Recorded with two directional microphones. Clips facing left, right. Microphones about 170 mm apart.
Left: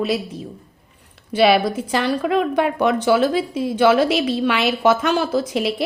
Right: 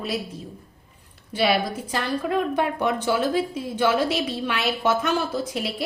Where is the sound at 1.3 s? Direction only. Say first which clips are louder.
Left 7 dB; 90° left.